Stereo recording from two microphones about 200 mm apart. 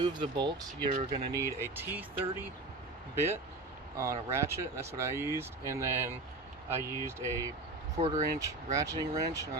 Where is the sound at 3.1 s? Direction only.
10° right (ahead or behind).